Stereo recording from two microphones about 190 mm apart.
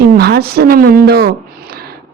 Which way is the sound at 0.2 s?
55° right (ahead or behind).